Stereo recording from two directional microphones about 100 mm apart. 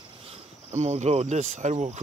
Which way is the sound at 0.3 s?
90° right.